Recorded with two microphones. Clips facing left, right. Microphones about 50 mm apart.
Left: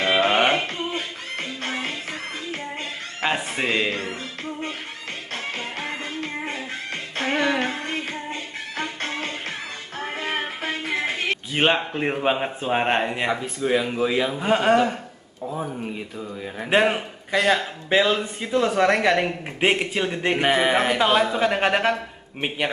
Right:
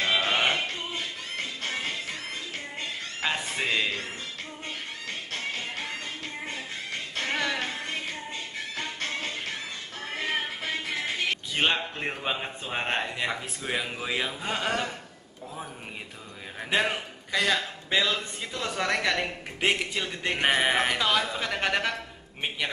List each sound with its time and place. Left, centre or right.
0.0 s music: left
0.7 s music: left
3.2 s a sound: left
3.5 s a man's voice: left
5.3 s music: left
7.2 s music: left
7.5 s music: left
11.5 s a man's voice: left
13.7 s a man's voice: centre
14.3 s a man's voice: left
16.6 s a man's voice: left
20.4 s a man's voice: centre
21.0 s a man's voice: left